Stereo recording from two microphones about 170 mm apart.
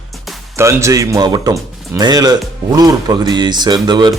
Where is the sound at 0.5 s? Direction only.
15° right (ahead or behind).